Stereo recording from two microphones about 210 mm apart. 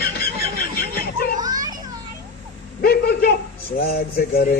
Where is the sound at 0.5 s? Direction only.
45° left (ahead or behind).